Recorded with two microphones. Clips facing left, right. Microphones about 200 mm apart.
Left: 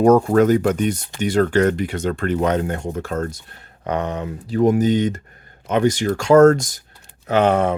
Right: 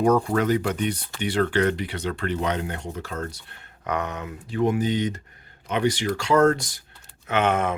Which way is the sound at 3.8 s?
30° left (ahead or behind).